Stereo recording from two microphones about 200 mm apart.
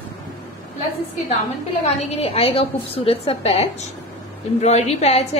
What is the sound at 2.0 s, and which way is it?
A woman's voice, 30° left (ahead or behind).